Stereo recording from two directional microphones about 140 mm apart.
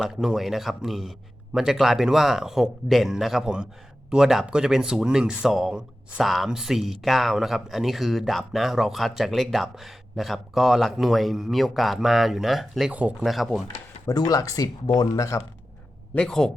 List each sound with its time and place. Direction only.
0.0 s speech: 5° right (ahead or behind)
14.1 s speech: 25° left (ahead or behind)
16.1 s speech: 5° left (ahead or behind)